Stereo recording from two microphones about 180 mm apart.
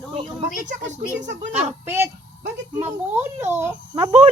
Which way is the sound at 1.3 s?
40° right (ahead or behind).